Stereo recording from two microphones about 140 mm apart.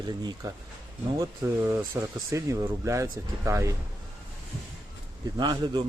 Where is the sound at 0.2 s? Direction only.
30° right (ahead or behind).